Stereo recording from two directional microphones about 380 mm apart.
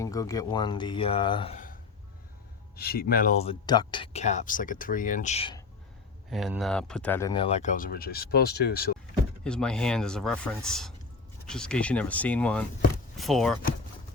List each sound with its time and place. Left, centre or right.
0.0 s speech: centre
6.3 s speech: centre; by 9.0 s left
9.4 s speech: centre